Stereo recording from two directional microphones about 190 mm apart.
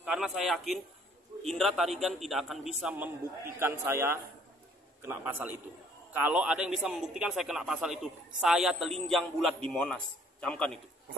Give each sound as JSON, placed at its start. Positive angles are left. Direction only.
{"t": 0.0, "sound": "a man's voice", "side_deg": -5}